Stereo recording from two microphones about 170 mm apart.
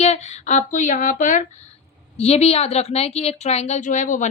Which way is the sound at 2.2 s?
40° left (ahead or behind).